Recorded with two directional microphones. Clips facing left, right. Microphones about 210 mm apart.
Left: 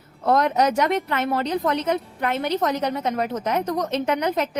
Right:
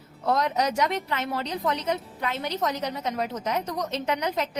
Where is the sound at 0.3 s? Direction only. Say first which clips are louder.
Left 5 dB; 55° left (ahead or behind).